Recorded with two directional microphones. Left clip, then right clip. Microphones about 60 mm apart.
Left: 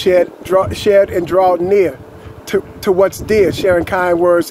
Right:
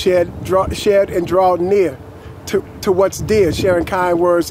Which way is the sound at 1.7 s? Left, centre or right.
Right.